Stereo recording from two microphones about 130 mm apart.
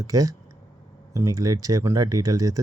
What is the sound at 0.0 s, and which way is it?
Speech, 25° right (ahead or behind).